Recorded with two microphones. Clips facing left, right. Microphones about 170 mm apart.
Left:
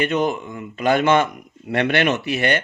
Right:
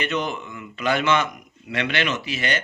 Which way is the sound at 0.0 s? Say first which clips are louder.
Left 6 dB; 50° left (ahead or behind).